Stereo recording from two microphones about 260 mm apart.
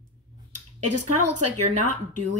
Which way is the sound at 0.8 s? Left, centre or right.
Right.